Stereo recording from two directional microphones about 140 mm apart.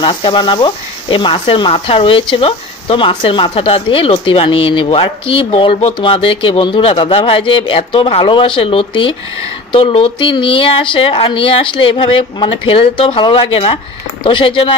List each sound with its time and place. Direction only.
0.0 s speech: 35° left (ahead or behind)